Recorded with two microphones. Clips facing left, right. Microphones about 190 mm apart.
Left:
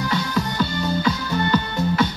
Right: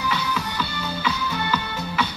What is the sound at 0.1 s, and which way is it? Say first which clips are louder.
Music: left 4 dB; 40° left (ahead or behind).